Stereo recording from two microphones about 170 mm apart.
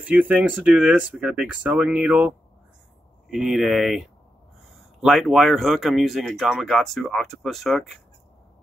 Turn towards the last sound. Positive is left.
turn(degrees=0)  # may be behind; listen again after turning